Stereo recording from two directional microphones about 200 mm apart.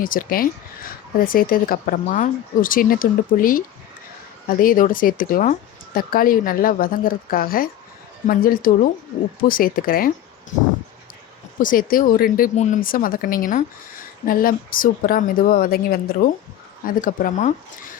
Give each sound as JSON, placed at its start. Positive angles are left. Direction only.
{"t": 0.0, "sound": "speech", "side_deg": 45}
{"t": 11.6, "sound": "speech", "side_deg": 45}